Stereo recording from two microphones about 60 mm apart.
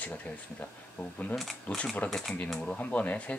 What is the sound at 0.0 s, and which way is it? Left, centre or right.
Speech, left.